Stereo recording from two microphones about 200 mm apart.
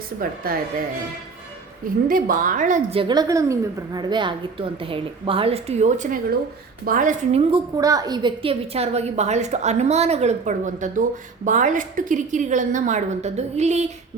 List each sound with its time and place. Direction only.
0.2 s a woman's voice: 45° right (ahead or behind)
2.0 s a woman's voice: 45° right (ahead or behind)
3.0 s a woman's voice: 20° right (ahead or behind); by 7.4 s 40° right (ahead or behind)
7.5 s a woman's voice: 20° right (ahead or behind); by 13.9 s 35° right (ahead or behind)